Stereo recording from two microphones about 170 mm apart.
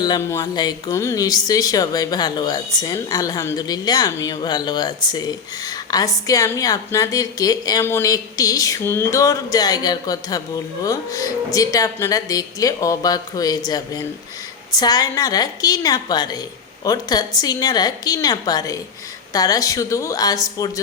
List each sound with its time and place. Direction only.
0.0 s speech: 20° left (ahead or behind)